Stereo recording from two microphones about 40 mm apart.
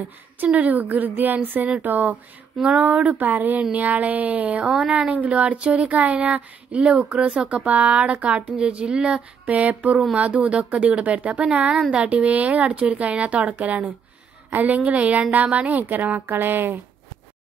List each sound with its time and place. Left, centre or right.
0.6 s a woman's voice: right
2.5 s speech: centre
2.8 s a woman's voice: right
3.7 s speech: right
4.6 s speech: right
5.0 s speech: right
5.6 s speech: right
5.9 s speech: right
9.5 s speech: right
15.8 s a woman's voice: right
16.3 s speech: right